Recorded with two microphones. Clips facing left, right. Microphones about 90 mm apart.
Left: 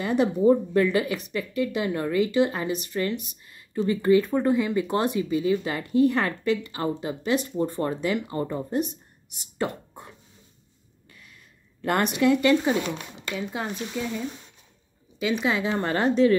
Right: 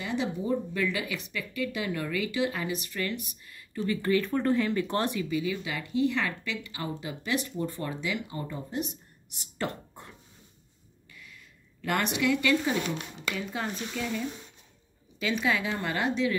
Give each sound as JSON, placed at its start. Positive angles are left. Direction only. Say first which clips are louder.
{"t": 0.0, "sound": "a woman's voice", "louder": "left 10 dB", "side_deg": 50}
{"t": 5.3, "sound": "a woman's voice", "louder": "left 6 dB", "side_deg": 35}
{"t": 9.4, "sound": "whispering", "louder": "left 5 dB", "side_deg": 15}
{"t": 11.8, "sound": "a woman's voice", "louder": "left 6 dB", "side_deg": 30}
{"t": 13.5, "sound": "a woman's voice", "louder": "left 3 dB", "side_deg": 20}
{"t": 15.1, "sound": "speech", "louder": "left 3 dB", "side_deg": 15}
{"t": 15.5, "sound": "a woman's voice", "louder": "left 5 dB", "side_deg": 30}